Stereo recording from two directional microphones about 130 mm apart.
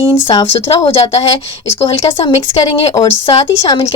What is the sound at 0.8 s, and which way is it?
Speech, 45° left (ahead or behind).